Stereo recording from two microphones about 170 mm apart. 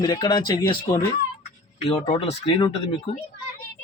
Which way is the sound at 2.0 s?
35° left (ahead or behind).